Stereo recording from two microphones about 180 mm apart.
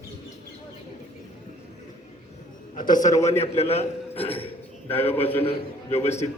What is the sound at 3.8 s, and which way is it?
Speech, 35° left (ahead or behind).